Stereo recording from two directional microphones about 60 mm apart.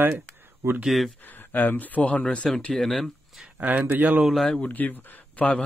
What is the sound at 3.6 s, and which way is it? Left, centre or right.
Speech, right.